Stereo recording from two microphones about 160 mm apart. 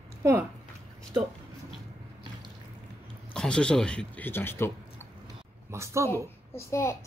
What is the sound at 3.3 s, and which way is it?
Speech, 5° left (ahead or behind).